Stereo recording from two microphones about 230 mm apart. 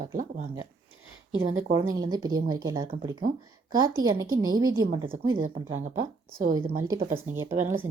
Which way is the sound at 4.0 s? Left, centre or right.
Centre.